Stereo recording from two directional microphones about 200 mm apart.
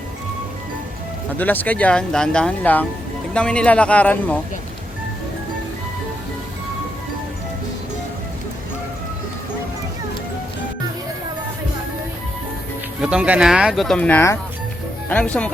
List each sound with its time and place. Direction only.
1.4 s speech: 10° left (ahead or behind)
13.0 s speech: 5° right (ahead or behind)